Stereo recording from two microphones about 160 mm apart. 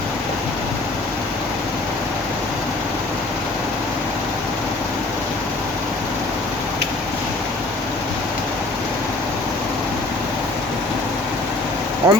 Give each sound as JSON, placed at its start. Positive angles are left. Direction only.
{"t": 12.0, "sound": "speech", "side_deg": -20}